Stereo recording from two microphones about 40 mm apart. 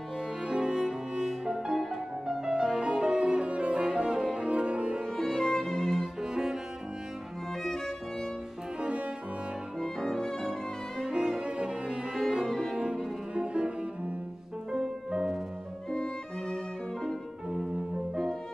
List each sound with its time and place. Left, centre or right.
0.5 s cello: centre
2.8 s music: right
4.4 s cello: right
5.1 s music: centre
5.8 s music: centre
6.2 s cello: centre
7.6 s music: centre
8.8 s cello: right
9.8 s music: centre
11.1 s cello: right
12.1 s cello: centre
12.7 s cello: right
14.7 s music: centre
15.9 s music: centre